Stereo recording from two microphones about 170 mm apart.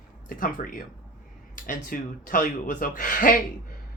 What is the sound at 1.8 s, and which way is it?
Speech, 50° left (ahead or behind).